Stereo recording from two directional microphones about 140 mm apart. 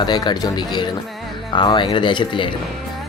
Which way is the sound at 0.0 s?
30° left (ahead or behind).